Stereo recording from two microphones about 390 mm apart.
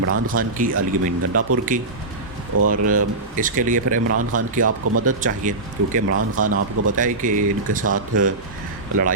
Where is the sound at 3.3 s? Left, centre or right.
Centre.